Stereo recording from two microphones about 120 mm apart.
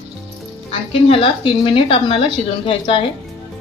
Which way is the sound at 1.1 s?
45° left (ahead or behind).